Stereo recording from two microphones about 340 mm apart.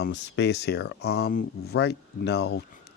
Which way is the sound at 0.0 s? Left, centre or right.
Left.